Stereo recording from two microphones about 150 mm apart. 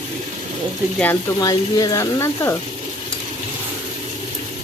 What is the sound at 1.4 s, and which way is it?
Speech, 25° left (ahead or behind).